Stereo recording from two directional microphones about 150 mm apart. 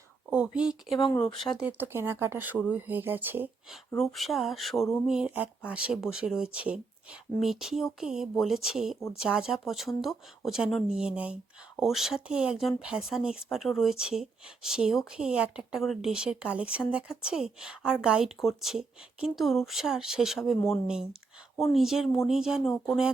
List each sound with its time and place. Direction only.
0.3 s speech: 5° right (ahead or behind)
0.9 s speech: 25° left (ahead or behind)
1.5 s speech: 10° right (ahead or behind)
3.7 s speech: centre (ahead or behind)